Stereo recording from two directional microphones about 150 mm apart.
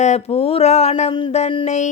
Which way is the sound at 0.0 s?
45° left (ahead or behind).